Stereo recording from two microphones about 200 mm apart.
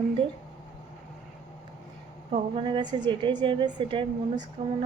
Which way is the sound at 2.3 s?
25° right (ahead or behind).